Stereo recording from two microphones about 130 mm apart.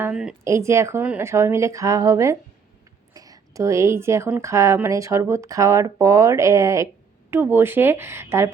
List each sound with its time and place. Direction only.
0.0 s speech: 5° right (ahead or behind)
0.4 s speech: 20° right (ahead or behind)
1.3 s a woman's voice: 20° right (ahead or behind)